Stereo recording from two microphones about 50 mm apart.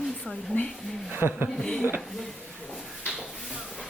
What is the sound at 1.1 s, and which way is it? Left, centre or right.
Speech, right.